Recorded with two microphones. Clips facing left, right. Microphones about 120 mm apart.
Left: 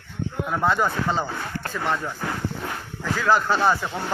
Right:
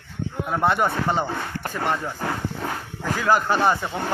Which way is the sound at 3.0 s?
15° right (ahead or behind).